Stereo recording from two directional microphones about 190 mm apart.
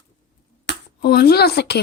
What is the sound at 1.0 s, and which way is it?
Speech, 55° left (ahead or behind).